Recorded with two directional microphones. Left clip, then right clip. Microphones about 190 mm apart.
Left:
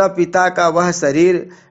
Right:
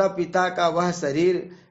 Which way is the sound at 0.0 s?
35° left (ahead or behind).